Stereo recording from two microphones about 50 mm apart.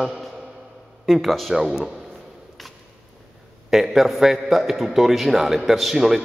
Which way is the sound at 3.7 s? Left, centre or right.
Centre.